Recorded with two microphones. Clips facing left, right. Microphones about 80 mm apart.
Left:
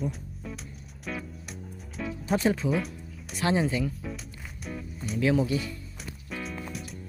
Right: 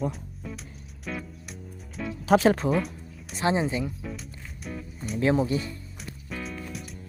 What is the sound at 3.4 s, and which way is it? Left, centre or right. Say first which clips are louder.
Speech: right 1 dB; right.